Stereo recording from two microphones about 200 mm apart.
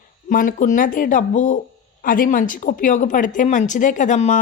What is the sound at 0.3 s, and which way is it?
Speech, 40° left (ahead or behind).